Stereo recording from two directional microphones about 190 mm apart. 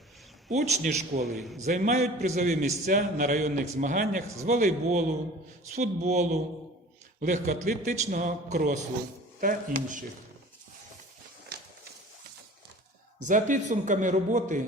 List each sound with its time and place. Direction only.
0.4 s a man's voice: 40° right (ahead or behind)
13.1 s a man's voice: 40° right (ahead or behind)